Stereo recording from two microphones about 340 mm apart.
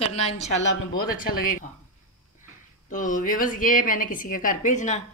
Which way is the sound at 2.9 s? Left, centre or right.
Left.